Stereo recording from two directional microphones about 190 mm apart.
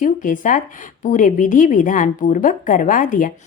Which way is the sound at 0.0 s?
45° left (ahead or behind).